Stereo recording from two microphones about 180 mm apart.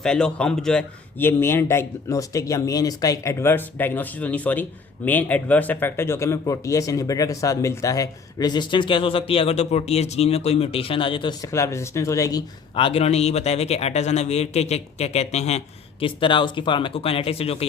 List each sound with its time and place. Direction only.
0.0 s a man's voice: 5° left (ahead or behind)
12.7 s speech: 30° left (ahead or behind)